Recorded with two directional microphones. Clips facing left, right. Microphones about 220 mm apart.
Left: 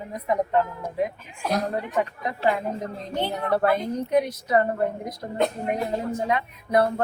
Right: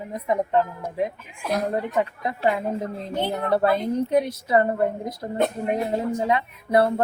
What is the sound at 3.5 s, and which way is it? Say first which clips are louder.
Speech: right 2 dB; 30° right (ahead or behind).